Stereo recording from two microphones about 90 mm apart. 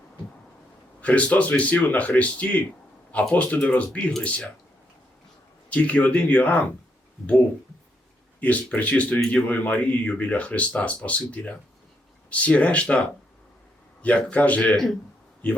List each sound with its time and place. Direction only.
1.0 s speech: 15° left (ahead or behind)
5.7 s speech: 15° left (ahead or behind)
8.4 s speech: 15° left (ahead or behind)